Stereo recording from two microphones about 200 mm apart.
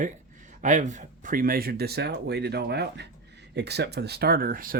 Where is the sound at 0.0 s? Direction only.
40° right (ahead or behind).